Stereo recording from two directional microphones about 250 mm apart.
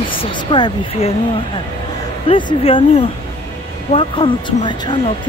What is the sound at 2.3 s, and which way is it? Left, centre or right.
Speech, left.